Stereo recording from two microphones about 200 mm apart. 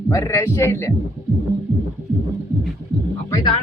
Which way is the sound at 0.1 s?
15° left (ahead or behind).